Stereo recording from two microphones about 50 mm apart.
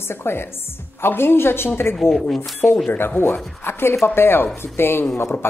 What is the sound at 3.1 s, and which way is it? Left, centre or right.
Speech, left.